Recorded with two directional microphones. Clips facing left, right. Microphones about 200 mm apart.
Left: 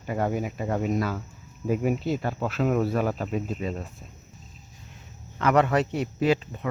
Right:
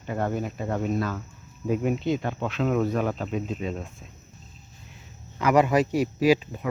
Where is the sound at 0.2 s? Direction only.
10° left (ahead or behind).